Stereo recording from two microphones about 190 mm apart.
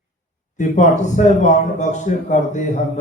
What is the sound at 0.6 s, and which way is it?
A man's voice, 40° left (ahead or behind).